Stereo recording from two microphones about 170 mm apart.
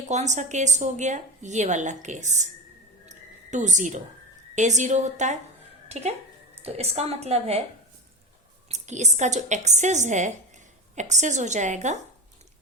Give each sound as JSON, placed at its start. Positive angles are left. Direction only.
{"t": 0.0, "sound": "a woman's voice", "side_deg": -45}
{"t": 3.1, "sound": "a sound", "side_deg": -45}
{"t": 4.5, "sound": "a woman's voice", "side_deg": -45}
{"t": 8.7, "sound": "a woman's voice", "side_deg": -40}